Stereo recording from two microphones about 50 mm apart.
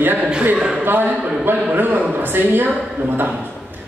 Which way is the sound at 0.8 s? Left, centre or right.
Right.